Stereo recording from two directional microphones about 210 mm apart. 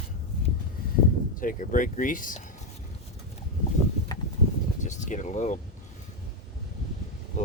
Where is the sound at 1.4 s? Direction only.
40° left (ahead or behind).